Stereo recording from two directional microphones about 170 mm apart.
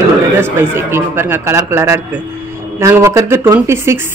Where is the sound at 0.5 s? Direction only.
15° right (ahead or behind).